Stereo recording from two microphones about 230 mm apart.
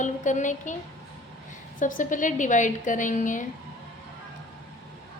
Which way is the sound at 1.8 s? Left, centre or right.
Left.